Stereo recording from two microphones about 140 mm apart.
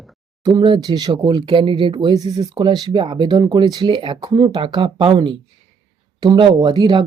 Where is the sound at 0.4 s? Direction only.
35° right (ahead or behind).